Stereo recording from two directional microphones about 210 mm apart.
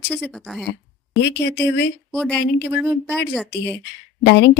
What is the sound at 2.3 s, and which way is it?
Speech, 55° left (ahead or behind).